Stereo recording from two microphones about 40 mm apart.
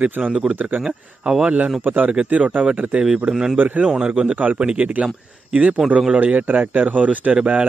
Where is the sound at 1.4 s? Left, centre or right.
Right.